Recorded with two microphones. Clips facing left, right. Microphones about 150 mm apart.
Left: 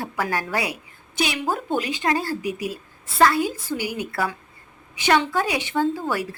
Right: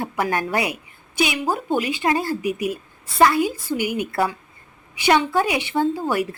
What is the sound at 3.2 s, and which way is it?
A woman's voice, 15° right (ahead or behind).